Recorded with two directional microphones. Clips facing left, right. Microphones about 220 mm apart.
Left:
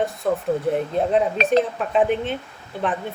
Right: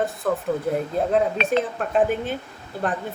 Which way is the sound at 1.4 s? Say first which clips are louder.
Left 3 dB; 40° left (ahead or behind).